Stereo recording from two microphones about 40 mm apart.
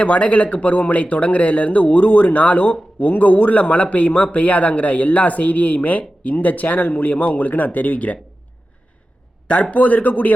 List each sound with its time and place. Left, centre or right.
0.0 s a man's voice: left
9.7 s a man's voice: left